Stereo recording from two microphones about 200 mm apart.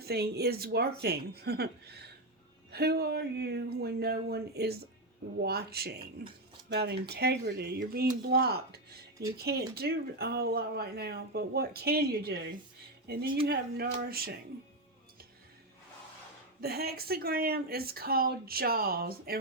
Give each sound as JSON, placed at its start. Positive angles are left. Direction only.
{"t": 0.0, "sound": "speech", "side_deg": -50}
{"t": 16.6, "sound": "speech", "side_deg": -50}